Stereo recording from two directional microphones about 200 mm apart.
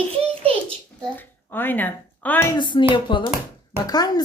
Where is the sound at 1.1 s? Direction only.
10° left (ahead or behind).